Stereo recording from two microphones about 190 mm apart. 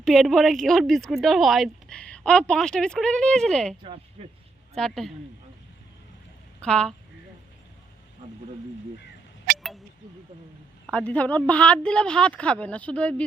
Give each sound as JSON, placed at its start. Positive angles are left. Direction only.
{"t": 0.0, "sound": "speech", "side_deg": 0}
{"t": 3.8, "sound": "speech", "side_deg": -30}
{"t": 4.7, "sound": "speech", "side_deg": 0}
{"t": 6.6, "sound": "speech", "side_deg": 5}
{"t": 10.8, "sound": "speech", "side_deg": 5}